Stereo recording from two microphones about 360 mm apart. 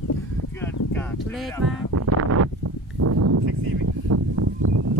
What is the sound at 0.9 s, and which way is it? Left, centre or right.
Speech, centre.